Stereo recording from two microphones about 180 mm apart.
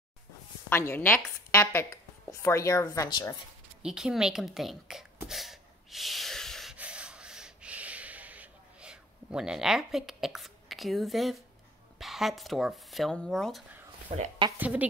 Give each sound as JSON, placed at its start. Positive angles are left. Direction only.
{"t": 0.7, "sound": "a woman's voice", "side_deg": 15}
{"t": 3.8, "sound": "speech", "side_deg": -5}
{"t": 5.3, "sound": "snort", "side_deg": 0}
{"t": 12.0, "sound": "a woman's voice", "side_deg": 0}